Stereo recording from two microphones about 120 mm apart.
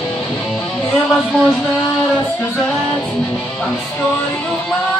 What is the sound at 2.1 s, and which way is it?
Music, 5° left (ahead or behind).